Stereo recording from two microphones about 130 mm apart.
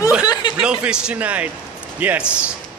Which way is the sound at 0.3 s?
35° left (ahead or behind).